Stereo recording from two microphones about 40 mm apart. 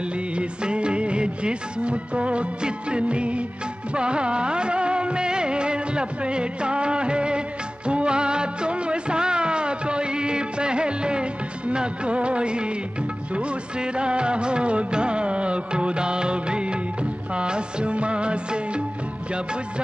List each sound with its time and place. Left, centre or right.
0.4 s music: right
3.9 s music of bollywood: right